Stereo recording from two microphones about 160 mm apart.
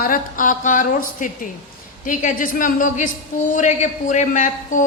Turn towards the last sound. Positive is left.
turn(degrees=50)  # may be behind; listen again after turning